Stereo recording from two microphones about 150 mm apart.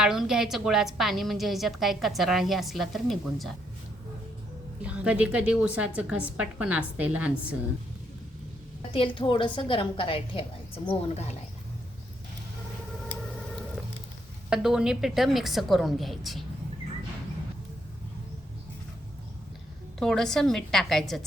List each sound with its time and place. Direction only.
0.0 s a woman's voice: 5° right (ahead or behind)
4.8 s a woman's voice: 10° right (ahead or behind)
8.9 s a woman's voice: 35° left (ahead or behind)
14.5 s a woman's voice: 5° right (ahead or behind)
20.0 s a woman's voice: 5° left (ahead or behind)